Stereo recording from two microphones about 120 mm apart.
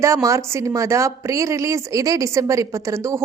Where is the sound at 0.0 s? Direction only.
25° right (ahead or behind).